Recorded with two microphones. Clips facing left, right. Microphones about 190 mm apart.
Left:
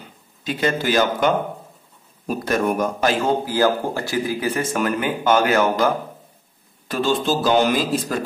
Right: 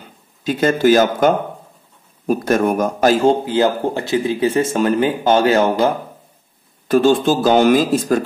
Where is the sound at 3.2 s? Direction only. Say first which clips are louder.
Right 4 dB; 25° right (ahead or behind).